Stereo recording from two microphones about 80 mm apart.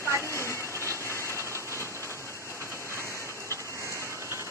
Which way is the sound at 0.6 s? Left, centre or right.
Right.